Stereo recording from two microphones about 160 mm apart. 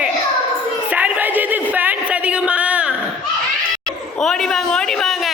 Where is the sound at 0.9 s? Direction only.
10° right (ahead or behind).